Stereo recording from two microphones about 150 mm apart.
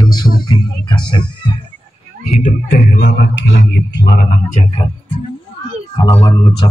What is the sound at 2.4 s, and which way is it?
Music, 70° left (ahead or behind).